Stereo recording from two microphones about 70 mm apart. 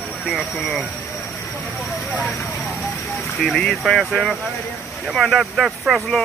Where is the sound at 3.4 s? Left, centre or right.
Centre.